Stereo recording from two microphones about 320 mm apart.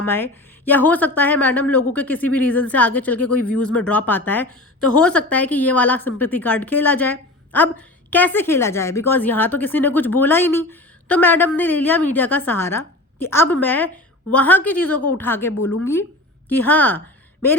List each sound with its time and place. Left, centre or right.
0.0 s a woman's voice: centre
3.2 s speech: left
3.7 s a woman's voice: centre
14.9 s speech: left
15.2 s speech: centre
15.5 s speech: left
16.5 s a woman's voice: centre